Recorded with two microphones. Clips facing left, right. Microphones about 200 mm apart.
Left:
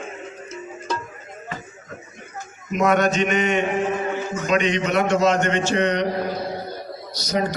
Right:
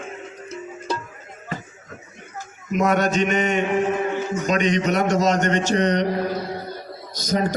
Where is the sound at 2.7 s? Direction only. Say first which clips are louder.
Left 1 dB; 40° right (ahead or behind).